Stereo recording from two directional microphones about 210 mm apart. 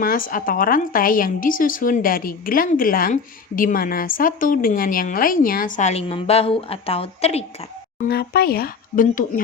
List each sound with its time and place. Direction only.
0.0 s a woman's voice: 40° left (ahead or behind)
7.9 s speech: 45° left (ahead or behind)